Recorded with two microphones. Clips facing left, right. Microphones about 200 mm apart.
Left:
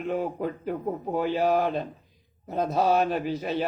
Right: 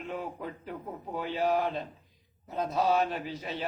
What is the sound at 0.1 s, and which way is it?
A man's voice, 50° left (ahead or behind).